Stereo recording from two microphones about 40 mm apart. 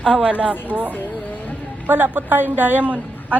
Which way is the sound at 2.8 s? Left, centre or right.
Right.